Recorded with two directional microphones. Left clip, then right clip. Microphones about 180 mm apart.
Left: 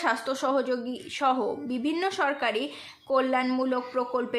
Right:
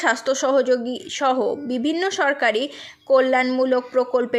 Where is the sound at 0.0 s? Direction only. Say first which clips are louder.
Right 7 dB; 30° right (ahead or behind).